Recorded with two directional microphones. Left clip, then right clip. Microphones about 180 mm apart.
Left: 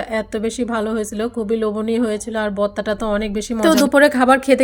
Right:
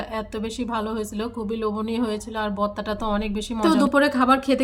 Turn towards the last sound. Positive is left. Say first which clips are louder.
# left 6 dB
turn(degrees=30)  # may be behind; listen again after turning